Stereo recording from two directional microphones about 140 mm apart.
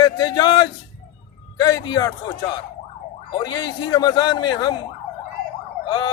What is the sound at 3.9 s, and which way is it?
Speech, 30° left (ahead or behind).